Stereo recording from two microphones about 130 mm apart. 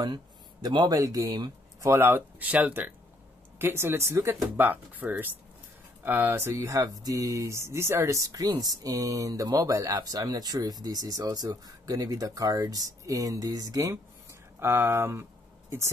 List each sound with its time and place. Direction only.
0.0 s speech: 35° right (ahead or behind)